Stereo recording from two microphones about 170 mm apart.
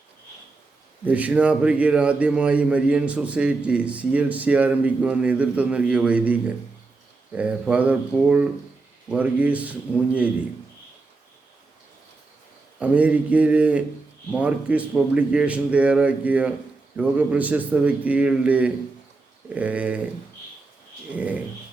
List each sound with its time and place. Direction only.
1.0 s a man's voice: 10° right (ahead or behind)
12.8 s a man's voice: 10° right (ahead or behind)
21.1 s a man's voice: 10° right (ahead or behind)